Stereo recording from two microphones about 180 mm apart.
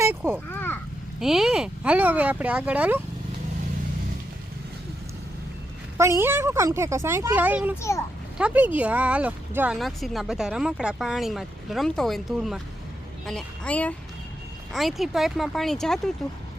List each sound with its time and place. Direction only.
0.0 s speech: 10° right (ahead or behind)
0.5 s a sound: 10° left (ahead or behind)
1.2 s speech: centre (ahead or behind)
6.0 s speech: 15° right (ahead or behind)
7.8 s a woman's voice: 15° left (ahead or behind)
8.4 s a woman's voice: 10° right (ahead or behind)